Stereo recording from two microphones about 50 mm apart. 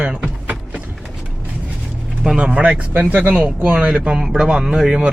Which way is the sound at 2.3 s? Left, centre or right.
Right.